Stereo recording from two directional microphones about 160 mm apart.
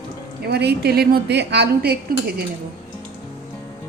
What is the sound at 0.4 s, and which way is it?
A woman's voice, 90° right.